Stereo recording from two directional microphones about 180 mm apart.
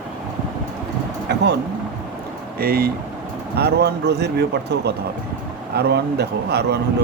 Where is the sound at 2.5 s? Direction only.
55° right (ahead or behind).